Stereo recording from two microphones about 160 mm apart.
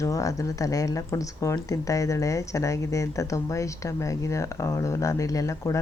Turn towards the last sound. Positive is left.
turn(degrees=20)  # may be behind; listen again after turning